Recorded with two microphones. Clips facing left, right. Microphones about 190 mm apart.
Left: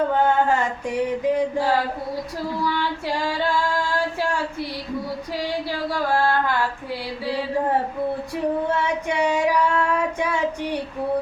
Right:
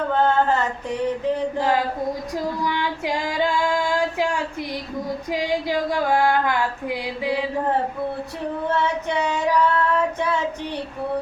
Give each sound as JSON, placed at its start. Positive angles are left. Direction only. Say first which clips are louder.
{"t": 0.1, "sound": "a sound", "louder": "even", "side_deg": 10}
{"t": 2.6, "sound": "female singing", "louder": "even", "side_deg": -15}
{"t": 8.7, "sound": "child singing", "louder": "right 1 dB", "side_deg": 10}